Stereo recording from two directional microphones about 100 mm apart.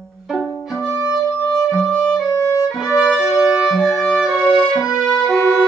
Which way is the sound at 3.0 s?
5° right (ahead or behind).